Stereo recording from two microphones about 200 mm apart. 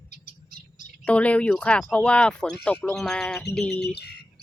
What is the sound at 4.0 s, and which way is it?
Bird, 55° left (ahead or behind).